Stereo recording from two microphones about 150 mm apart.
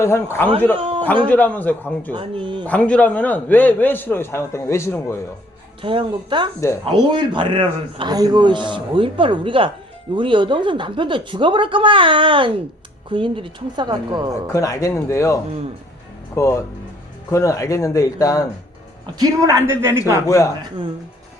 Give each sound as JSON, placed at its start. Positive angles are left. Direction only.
{"t": 0.0, "sound": "a man's voice", "side_deg": 15}
{"t": 0.8, "sound": "a sound", "side_deg": -35}
{"t": 1.3, "sound": "a man's voice", "side_deg": 10}
{"t": 2.1, "sound": "a man's voice", "side_deg": -35}
{"t": 2.6, "sound": "a man's voice", "side_deg": 10}
{"t": 5.8, "sound": "a man's voice", "side_deg": -35}
{"t": 14.5, "sound": "speech", "side_deg": 25}
{"t": 19.2, "sound": "a man's voice", "side_deg": -20}
{"t": 20.2, "sound": "speech", "side_deg": 20}